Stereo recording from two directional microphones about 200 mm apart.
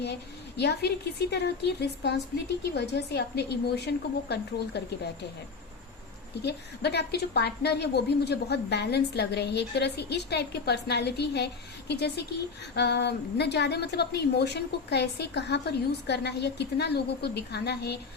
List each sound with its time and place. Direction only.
0.0 s a woman's voice: 55° left (ahead or behind)
6.4 s a woman's voice: 55° left (ahead or behind)